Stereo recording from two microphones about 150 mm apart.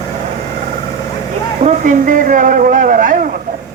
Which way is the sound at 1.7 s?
60° right (ahead or behind).